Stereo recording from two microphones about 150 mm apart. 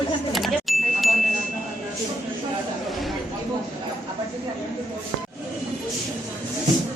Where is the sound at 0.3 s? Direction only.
Centre (ahead or behind).